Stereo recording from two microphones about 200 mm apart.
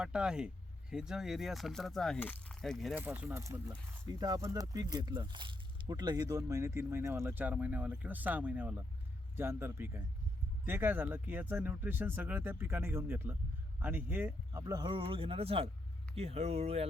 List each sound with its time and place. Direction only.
0.0 s speech: 5° right (ahead or behind)
3.0 s speech: 10° right (ahead or behind)
14.6 s speech: 20° right (ahead or behind)